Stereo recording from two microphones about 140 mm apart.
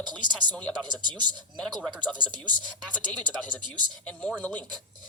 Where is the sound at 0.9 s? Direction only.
30° right (ahead or behind).